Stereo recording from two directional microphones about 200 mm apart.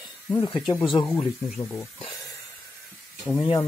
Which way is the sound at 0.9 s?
15° left (ahead or behind).